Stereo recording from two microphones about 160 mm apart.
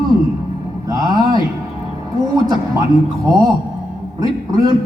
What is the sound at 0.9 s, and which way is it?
Speech, 25° right (ahead or behind).